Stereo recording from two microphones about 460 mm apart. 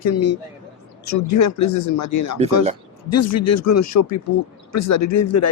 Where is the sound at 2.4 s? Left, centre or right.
Centre.